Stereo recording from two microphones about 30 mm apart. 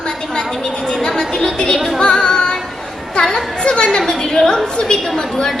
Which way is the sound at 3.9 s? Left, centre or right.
Left.